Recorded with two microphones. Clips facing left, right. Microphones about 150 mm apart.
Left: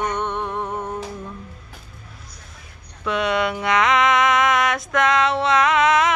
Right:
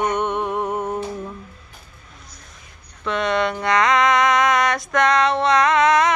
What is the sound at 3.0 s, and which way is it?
Mantra, 5° left (ahead or behind).